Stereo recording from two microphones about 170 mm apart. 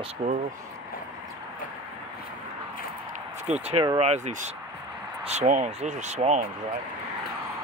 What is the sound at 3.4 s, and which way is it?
Speech, 40° right (ahead or behind).